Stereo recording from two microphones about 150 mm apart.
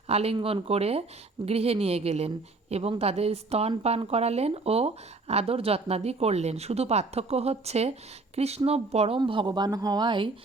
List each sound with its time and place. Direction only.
0.1 s a woman's voice: 40° right (ahead or behind)